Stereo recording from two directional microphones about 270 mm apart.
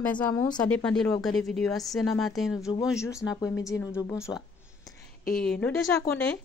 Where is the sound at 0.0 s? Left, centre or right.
Centre.